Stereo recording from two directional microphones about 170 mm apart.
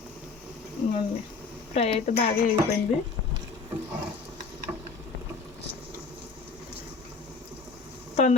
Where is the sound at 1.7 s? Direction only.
35° left (ahead or behind).